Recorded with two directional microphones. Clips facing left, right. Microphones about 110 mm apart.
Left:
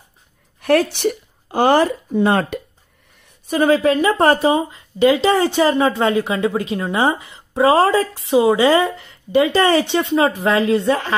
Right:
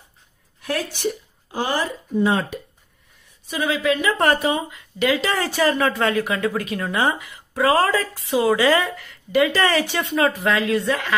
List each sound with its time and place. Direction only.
0.6 s speech: 60° left (ahead or behind)
3.4 s speech: 45° left (ahead or behind)